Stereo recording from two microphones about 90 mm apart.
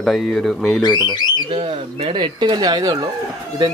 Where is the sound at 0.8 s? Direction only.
55° left (ahead or behind).